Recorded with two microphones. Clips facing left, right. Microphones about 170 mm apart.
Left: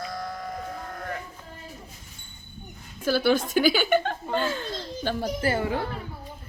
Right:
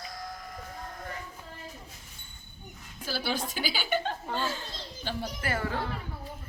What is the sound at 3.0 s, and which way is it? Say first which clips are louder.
A child's voice: left 10 dB; 50° left (ahead or behind).